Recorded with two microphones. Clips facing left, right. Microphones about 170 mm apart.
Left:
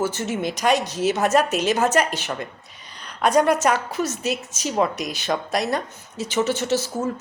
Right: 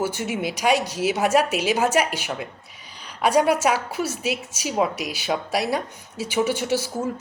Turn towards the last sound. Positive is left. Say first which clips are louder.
# left 1 dB
turn(degrees=-10)  # may be behind; listen again after turning